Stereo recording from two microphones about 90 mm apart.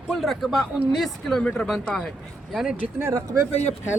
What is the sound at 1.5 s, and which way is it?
Speech, 10° left (ahead or behind).